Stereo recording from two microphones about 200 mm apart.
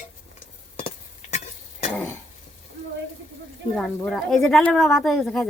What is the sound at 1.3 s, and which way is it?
Stir, 40° left (ahead or behind).